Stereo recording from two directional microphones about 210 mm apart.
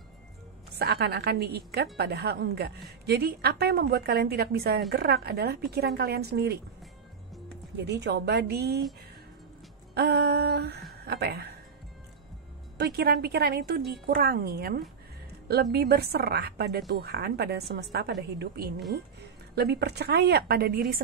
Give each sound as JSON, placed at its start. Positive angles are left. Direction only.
{"t": 0.7, "sound": "a woman's voice", "side_deg": -50}
{"t": 7.7, "sound": "a woman's voice", "side_deg": -55}
{"t": 9.9, "sound": "a woman's voice", "side_deg": -50}
{"t": 12.7, "sound": "a woman's voice", "side_deg": -50}
{"t": 19.5, "sound": "a woman's voice", "side_deg": -50}